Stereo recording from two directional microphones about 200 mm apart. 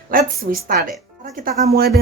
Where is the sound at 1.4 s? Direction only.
45° right (ahead or behind).